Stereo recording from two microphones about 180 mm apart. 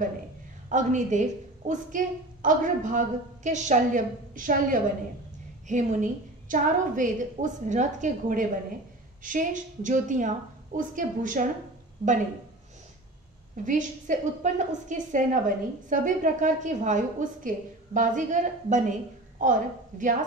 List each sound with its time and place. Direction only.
0.7 s a woman's voice: 45° right (ahead or behind)
13.7 s a woman's voice: 45° right (ahead or behind)